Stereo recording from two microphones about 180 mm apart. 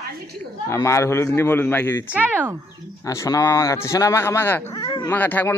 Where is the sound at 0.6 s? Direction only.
15° left (ahead or behind).